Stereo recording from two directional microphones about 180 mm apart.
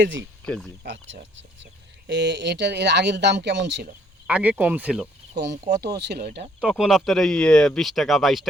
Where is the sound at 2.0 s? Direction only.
75° right (ahead or behind).